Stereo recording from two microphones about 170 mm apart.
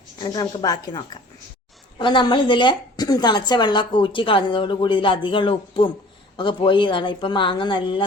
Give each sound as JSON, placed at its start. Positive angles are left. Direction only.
{"t": 0.2, "sound": "a woman's voice", "side_deg": 25}